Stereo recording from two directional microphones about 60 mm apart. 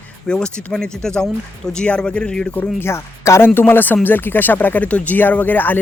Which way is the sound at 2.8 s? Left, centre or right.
Left.